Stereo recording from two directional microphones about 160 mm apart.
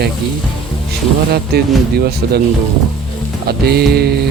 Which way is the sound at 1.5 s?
80° right.